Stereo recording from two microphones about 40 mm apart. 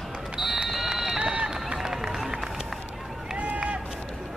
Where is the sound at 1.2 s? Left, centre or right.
Right.